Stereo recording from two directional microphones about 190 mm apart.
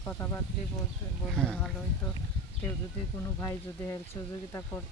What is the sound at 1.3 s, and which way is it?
Speech, 5° left (ahead or behind).